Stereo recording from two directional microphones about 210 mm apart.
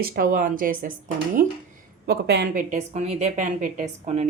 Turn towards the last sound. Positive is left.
turn(degrees=-30)  # may be behind; listen again after turning